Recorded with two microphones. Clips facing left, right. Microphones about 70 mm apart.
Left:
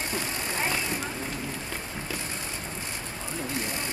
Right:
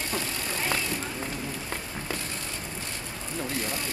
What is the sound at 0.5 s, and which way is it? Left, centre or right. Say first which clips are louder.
Vehicle: even; left.